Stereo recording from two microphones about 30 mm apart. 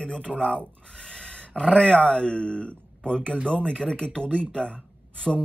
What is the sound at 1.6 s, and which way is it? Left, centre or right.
Speech, left.